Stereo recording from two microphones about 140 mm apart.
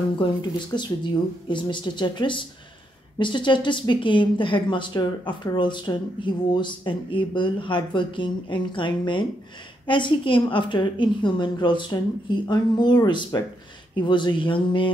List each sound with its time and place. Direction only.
0.2 s speech: 30° left (ahead or behind)